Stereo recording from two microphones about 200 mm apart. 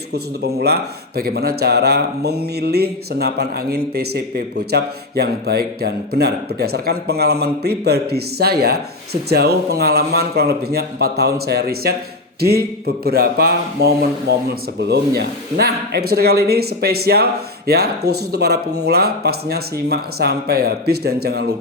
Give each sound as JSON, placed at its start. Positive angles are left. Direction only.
{"t": 0.1, "sound": "speech", "side_deg": -55}